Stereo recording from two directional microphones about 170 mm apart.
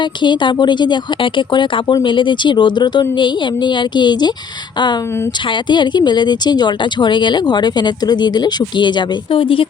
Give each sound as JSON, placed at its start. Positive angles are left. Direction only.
{"t": 0.0, "sound": "speech", "side_deg": 25}
{"t": 5.5, "sound": "speech", "side_deg": 25}